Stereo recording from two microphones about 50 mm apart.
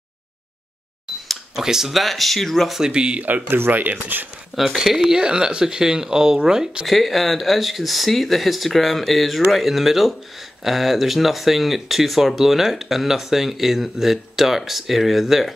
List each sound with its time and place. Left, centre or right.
1.5 s speech: centre
2.8 s speech: centre
3.3 s speech: right
4.7 s speech: centre
6.9 s speech: centre